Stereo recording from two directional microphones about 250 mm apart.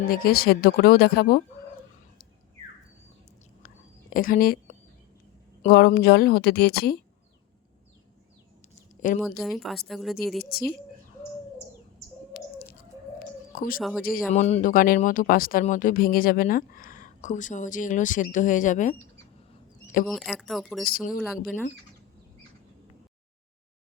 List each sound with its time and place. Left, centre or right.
0.1 s speech: left
4.1 s speech: left
9.0 s speech: left
9.4 s a woman's voice: centre
12.3 s bird: left
13.5 s speech: left
20.1 s a woman's voice: centre
20.9 s speech: left
21.2 s a woman's voice: centre